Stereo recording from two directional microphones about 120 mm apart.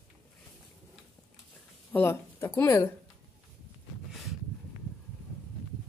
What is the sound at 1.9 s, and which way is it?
Speech, 20° left (ahead or behind).